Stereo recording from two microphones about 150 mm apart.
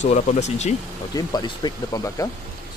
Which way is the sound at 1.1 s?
30° left (ahead or behind).